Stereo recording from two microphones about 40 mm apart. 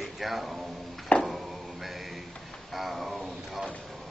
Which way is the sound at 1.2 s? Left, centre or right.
Centre.